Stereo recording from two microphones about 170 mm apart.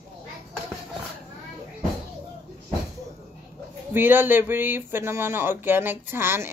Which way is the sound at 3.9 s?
10° right (ahead or behind).